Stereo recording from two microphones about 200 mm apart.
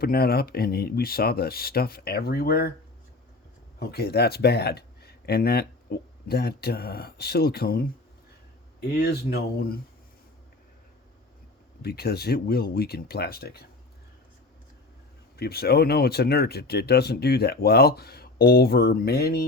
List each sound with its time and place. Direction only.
0.0 s speech: 50° left (ahead or behind)
3.8 s speech: 50° left (ahead or behind)
11.8 s speech: 50° left (ahead or behind)
15.4 s speech: 50° left (ahead or behind)